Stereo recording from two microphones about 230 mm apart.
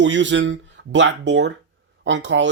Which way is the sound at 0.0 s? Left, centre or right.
Right.